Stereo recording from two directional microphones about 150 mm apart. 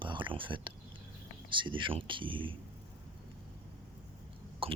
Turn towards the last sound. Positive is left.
turn(degrees=-35)  # may be behind; listen again after turning